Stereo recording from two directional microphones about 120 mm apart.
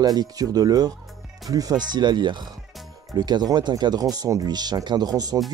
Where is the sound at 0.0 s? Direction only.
35° right (ahead or behind).